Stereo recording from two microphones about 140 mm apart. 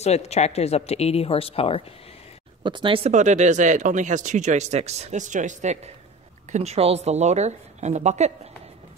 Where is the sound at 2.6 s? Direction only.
35° right (ahead or behind).